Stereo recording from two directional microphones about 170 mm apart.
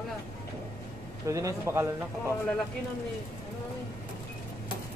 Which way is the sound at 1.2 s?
20° right (ahead or behind).